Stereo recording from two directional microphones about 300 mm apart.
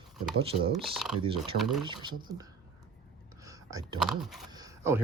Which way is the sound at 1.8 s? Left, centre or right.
Centre.